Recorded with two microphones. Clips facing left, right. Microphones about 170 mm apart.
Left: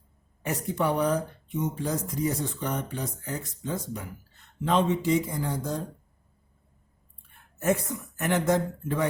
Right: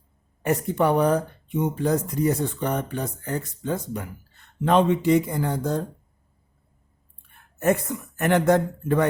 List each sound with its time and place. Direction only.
0.4 s speech: 60° right (ahead or behind)
7.6 s speech: 60° right (ahead or behind)